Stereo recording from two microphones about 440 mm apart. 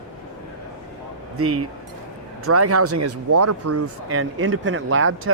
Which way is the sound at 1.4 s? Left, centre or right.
Right.